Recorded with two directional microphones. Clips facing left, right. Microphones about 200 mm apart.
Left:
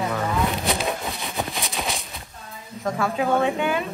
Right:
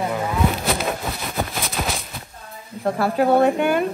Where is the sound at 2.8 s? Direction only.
35° right (ahead or behind); by 3.9 s 50° right (ahead or behind).